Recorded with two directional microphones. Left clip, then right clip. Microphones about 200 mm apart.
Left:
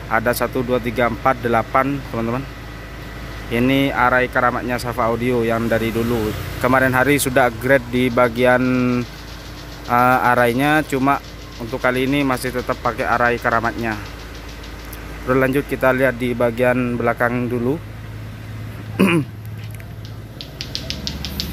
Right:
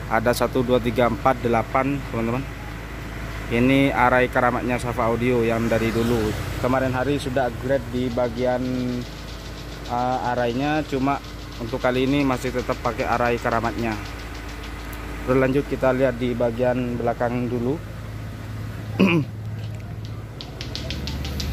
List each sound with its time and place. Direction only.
0.1 s speech: centre (ahead or behind)
3.5 s speech: centre (ahead or behind)
6.6 s speech: 10° left (ahead or behind); by 8.6 s 30° left (ahead or behind)
9.8 s speech: 30° left (ahead or behind); by 11.1 s 15° left (ahead or behind)
11.7 s speech: centre (ahead or behind)
15.2 s speech: 5° left (ahead or behind)
16.3 s speech: 15° left (ahead or behind)
18.9 s a sound: 5° left (ahead or behind)